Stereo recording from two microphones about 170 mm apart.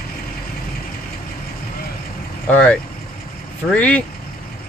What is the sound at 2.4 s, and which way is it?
Speech, 10° left (ahead or behind).